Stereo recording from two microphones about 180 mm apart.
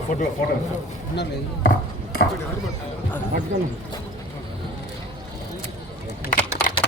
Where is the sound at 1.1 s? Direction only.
70° left (ahead or behind).